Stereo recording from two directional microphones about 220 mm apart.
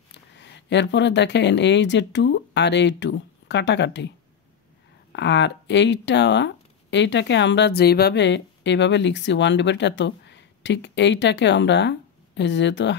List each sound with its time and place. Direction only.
0.1 s speech: 50° left (ahead or behind)
5.1 s speech: 50° left (ahead or behind)